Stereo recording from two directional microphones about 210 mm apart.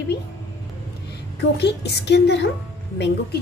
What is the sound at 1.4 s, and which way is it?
A woman's voice, 55° left (ahead or behind).